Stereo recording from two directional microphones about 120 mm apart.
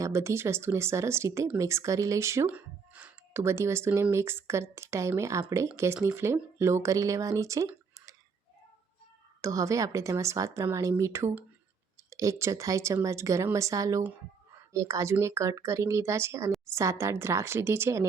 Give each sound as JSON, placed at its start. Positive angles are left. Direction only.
{"t": 0.0, "sound": "speech", "side_deg": -25}
{"t": 2.5, "sound": "speech", "side_deg": -10}
{"t": 9.4, "sound": "speech", "side_deg": -25}